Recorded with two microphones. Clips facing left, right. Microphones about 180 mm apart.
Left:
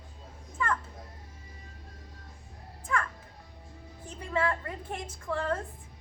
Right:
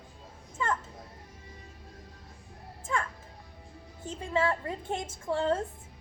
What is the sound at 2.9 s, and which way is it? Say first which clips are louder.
Music: even; 25° right (ahead or behind).